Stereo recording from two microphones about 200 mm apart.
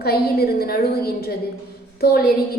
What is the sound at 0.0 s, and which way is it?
A woman's voice, 50° left (ahead or behind).